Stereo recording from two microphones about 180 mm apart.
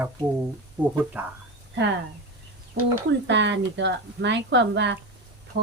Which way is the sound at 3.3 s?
80° right.